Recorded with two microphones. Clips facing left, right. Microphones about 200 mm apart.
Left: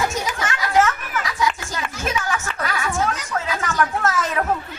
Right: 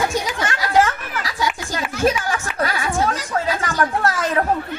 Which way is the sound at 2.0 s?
30° right (ahead or behind).